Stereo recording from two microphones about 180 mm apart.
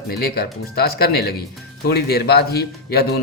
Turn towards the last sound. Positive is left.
turn(degrees=60)  # may be behind; listen again after turning